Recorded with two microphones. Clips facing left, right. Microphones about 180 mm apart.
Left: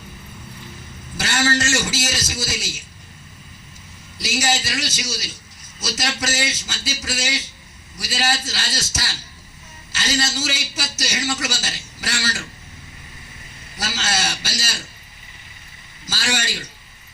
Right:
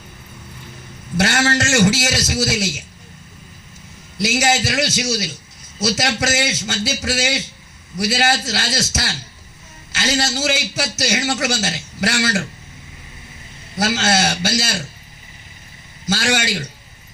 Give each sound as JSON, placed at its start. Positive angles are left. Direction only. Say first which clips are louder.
{"t": 1.1, "sound": "a man's voice", "louder": "right 4 dB", "side_deg": -65}
{"t": 4.2, "sound": "a man's voice", "louder": "right 5 dB", "side_deg": -70}
{"t": 13.7, "sound": "a man's voice", "louder": "right 8 dB", "side_deg": -65}
{"t": 16.0, "sound": "a man's voice", "louder": "right 7 dB", "side_deg": -65}